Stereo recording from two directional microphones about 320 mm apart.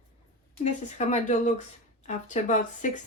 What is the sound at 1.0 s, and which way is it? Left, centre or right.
A woman's voice, left.